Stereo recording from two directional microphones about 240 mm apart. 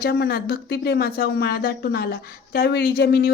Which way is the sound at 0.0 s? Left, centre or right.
Left.